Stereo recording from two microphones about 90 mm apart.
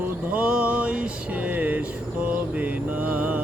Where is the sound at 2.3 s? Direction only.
15° right (ahead or behind).